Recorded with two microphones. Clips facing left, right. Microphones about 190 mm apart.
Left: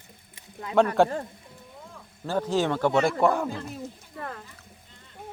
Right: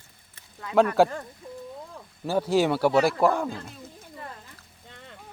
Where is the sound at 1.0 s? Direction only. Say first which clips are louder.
Right 1 dB; centre (ahead or behind).